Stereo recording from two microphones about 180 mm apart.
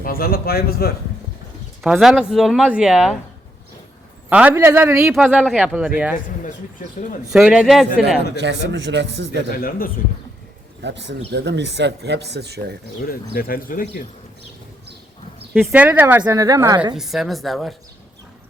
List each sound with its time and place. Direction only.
0.0 s a man's voice: 55° left (ahead or behind)
1.8 s speech: centre (ahead or behind)
4.3 s a woman's voice: 10° right (ahead or behind)
7.3 s speech: 5° right (ahead or behind)
8.4 s speech: 75° right (ahead or behind)
9.5 s speech: 55° left (ahead or behind)
10.8 s speech: 75° right (ahead or behind)
13.1 s speech: 55° left (ahead or behind)
15.6 s a woman's voice: 10° right (ahead or behind)
16.9 s speech: centre (ahead or behind)